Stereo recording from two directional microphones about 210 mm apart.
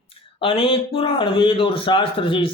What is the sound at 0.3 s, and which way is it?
Speech, 25° left (ahead or behind).